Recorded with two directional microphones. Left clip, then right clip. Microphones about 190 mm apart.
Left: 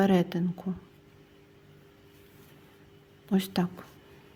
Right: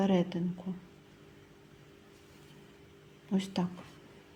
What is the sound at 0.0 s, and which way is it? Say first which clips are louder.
Speech: left 5 dB; 30° left (ahead or behind).